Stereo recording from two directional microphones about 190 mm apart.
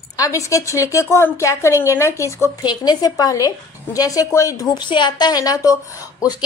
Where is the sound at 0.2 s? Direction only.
15° left (ahead or behind).